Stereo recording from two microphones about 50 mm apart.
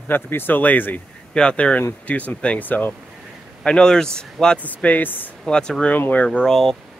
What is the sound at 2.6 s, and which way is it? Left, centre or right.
Speech, left.